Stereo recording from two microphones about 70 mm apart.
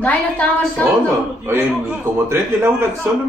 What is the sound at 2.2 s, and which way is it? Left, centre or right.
Speech, right.